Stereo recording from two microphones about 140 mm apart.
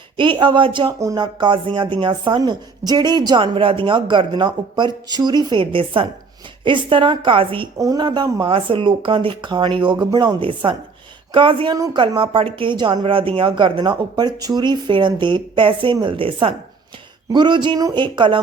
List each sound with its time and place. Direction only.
0.2 s speech: 35° right (ahead or behind)
7.8 s speech: 25° right (ahead or behind)